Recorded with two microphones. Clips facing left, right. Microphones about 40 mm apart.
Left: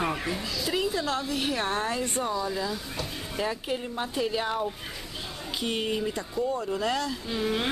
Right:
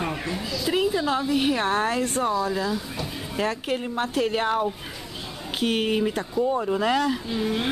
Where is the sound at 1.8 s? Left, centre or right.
Right.